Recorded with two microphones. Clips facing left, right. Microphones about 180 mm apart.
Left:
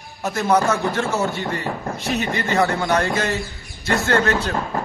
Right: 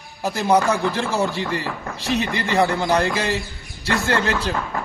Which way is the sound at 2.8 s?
30° right (ahead or behind).